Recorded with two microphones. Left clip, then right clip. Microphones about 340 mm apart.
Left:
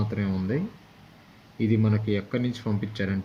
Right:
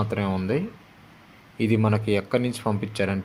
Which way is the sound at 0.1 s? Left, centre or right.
Right.